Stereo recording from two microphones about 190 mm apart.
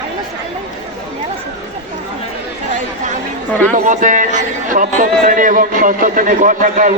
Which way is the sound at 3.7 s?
40° right (ahead or behind).